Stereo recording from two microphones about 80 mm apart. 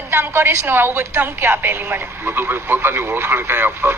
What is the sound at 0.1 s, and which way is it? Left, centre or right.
Speech, right.